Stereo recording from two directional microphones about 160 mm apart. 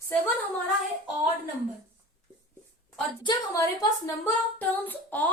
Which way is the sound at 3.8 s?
15° left (ahead or behind).